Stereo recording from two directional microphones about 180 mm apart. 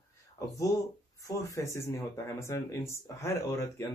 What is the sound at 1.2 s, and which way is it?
Speech, 20° left (ahead or behind).